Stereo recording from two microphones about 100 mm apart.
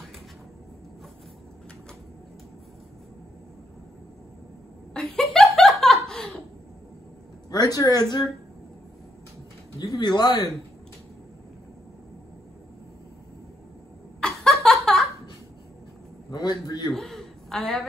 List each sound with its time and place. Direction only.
4.9 s laughter: 5° left (ahead or behind)
7.5 s speech: 40° left (ahead or behind)
9.8 s speech: 45° left (ahead or behind)
14.2 s a sound: 5° left (ahead or behind)
16.3 s a man's voice: 40° left (ahead or behind)
16.9 s a sound: 5° left (ahead or behind)